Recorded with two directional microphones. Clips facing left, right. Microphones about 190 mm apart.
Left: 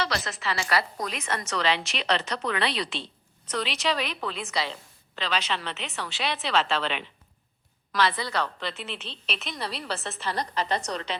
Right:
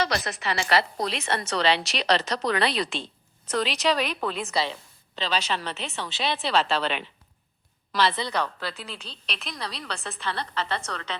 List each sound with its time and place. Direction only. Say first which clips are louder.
0.1 s a woman's voice: right 2 dB; 20° right (ahead or behind); by 4.4 s 45° right (ahead or behind)
5.1 s speech: right 2 dB; 30° right (ahead or behind)
7.9 s a woman's voice: right 1 dB; 25° right (ahead or behind)
8.5 s a woman's voice: left 1 dB; centre (ahead or behind)
10.5 s a woman's voice: left 2 dB; 15° left (ahead or behind)